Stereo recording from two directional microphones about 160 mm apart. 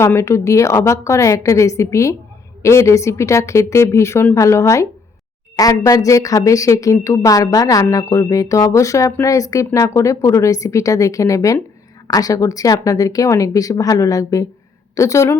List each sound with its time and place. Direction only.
0.0 s a woman's voice: 15° left (ahead or behind)